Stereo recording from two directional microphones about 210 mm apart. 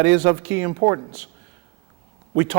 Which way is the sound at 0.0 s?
15° right (ahead or behind).